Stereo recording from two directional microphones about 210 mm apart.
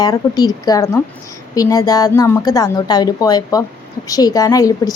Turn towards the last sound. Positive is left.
turn(degrees=15)  # may be behind; listen again after turning